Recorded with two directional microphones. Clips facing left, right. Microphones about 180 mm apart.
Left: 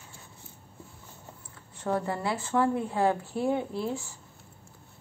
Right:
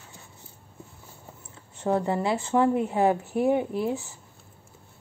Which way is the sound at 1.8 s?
25° right (ahead or behind).